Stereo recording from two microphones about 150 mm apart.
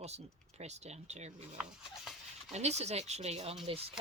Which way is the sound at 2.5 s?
45° right (ahead or behind).